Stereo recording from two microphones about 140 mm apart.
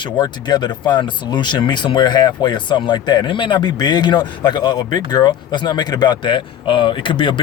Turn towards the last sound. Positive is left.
turn(degrees=35)  # may be behind; listen again after turning